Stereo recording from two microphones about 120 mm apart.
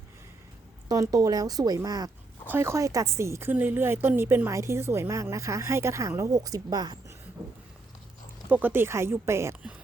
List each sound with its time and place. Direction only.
0.9 s a woman's voice: 30° right (ahead or behind)
8.4 s a woman's voice: 15° right (ahead or behind)